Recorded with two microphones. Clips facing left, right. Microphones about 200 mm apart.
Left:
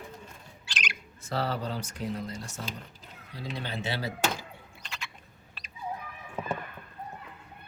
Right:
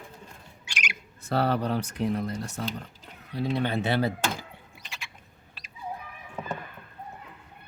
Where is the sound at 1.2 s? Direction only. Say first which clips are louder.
Right 6 dB; 60° right (ahead or behind).